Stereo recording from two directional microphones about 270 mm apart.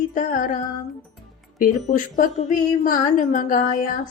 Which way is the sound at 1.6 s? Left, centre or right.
Left.